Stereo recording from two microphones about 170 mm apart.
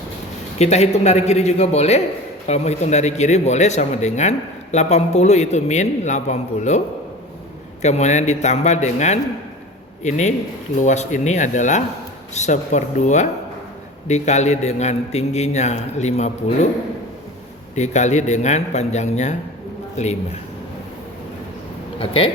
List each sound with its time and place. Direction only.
0.6 s speech: 40° left (ahead or behind)
17.7 s speech: 45° left (ahead or behind)
21.9 s speech: 30° left (ahead or behind)